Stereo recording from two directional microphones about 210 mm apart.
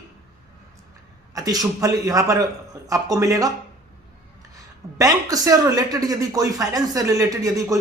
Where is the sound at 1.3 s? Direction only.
15° right (ahead or behind).